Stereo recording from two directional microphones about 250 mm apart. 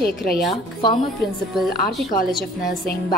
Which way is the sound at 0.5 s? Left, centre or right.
Centre.